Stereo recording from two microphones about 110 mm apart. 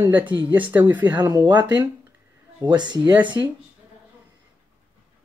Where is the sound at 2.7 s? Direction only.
45° right (ahead or behind).